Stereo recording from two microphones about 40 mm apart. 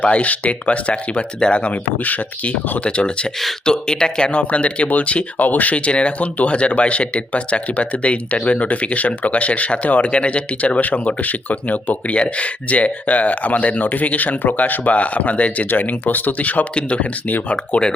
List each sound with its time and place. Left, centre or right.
0.0 s speech: left
1.6 s speech: left
2.8 s speech: left
10.8 s speech: left
15.7 s speech: left
16.7 s speech: left